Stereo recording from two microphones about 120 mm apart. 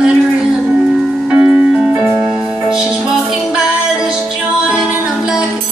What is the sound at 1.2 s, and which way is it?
Music, 10° right (ahead or behind).